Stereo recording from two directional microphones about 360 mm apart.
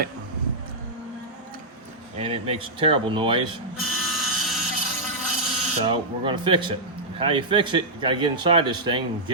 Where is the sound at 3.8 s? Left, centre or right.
Centre.